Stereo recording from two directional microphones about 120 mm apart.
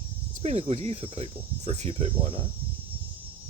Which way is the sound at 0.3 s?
65° right (ahead or behind).